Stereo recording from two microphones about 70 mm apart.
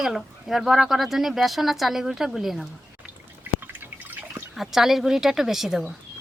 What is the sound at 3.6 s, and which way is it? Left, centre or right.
Drip, right.